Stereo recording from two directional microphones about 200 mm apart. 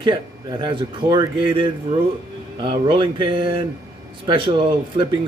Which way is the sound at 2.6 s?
25° right (ahead or behind).